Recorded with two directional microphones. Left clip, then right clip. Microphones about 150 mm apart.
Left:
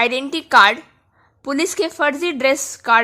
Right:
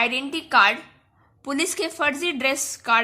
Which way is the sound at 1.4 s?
30° left (ahead or behind).